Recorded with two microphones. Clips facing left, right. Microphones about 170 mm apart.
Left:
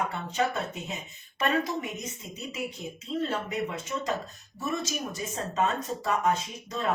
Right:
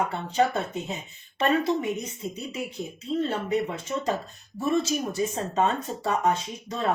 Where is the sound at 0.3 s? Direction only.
30° right (ahead or behind).